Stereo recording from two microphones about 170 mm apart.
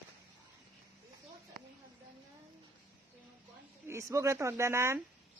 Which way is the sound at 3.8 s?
15° right (ahead or behind).